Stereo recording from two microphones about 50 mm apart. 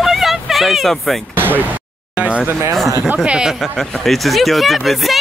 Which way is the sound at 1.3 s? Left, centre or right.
Right.